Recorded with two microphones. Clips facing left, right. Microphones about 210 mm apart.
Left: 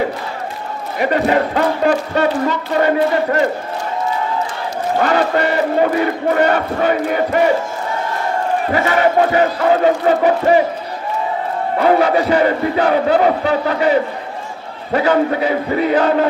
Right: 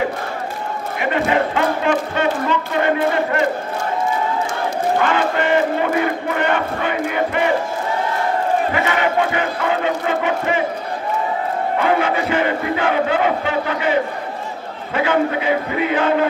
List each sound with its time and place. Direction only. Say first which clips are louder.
0.9 s speech: left 3 dB; 40° left (ahead or behind)
5.0 s speech: left 3 dB; 40° left (ahead or behind)
8.7 s speech: left 4 dB; 40° left (ahead or behind)
11.8 s speech: left 6 dB; 40° left (ahead or behind)